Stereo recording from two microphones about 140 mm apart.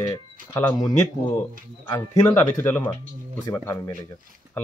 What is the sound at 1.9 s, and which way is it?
Speech, 20° left (ahead or behind).